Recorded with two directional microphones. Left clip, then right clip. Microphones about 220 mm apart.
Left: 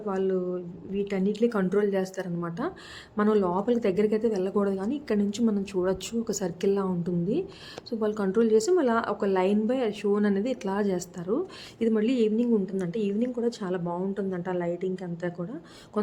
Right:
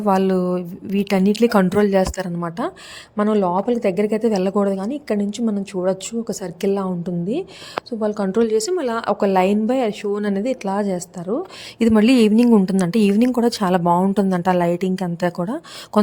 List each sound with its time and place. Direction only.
0.0 s a woman's voice: 50° right (ahead or behind); by 11.4 s 25° right (ahead or behind)
11.8 s speech: 50° right (ahead or behind)